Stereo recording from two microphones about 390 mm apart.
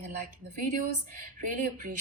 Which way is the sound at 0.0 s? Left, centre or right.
Centre.